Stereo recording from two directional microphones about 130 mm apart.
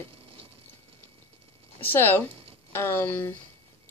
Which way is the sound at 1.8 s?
15° left (ahead or behind).